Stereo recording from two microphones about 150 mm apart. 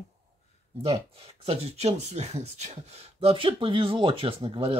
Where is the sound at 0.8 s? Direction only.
40° right (ahead or behind).